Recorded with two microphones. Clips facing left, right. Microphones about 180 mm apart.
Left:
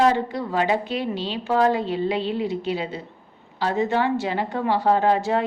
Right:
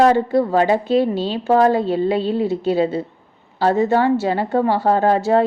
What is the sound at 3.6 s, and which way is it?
A woman's voice, 40° right (ahead or behind).